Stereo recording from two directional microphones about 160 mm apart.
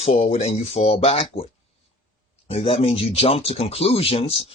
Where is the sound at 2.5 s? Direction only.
35° left (ahead or behind).